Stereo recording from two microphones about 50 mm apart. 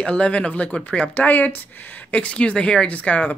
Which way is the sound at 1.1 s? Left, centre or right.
Left.